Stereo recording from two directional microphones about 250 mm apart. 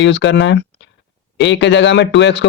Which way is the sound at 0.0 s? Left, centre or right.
Left.